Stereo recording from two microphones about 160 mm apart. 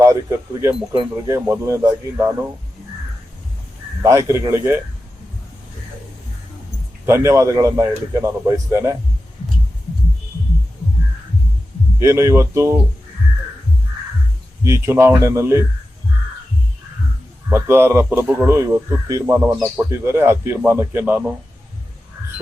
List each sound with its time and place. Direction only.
0.0 s a man's voice: 20° right (ahead or behind)
4.0 s speech: 20° right (ahead or behind)
7.0 s a man's voice: 15° right (ahead or behind)
11.9 s speech: 15° right (ahead or behind)
14.6 s speech: 15° right (ahead or behind)
17.5 s speech: 15° right (ahead or behind)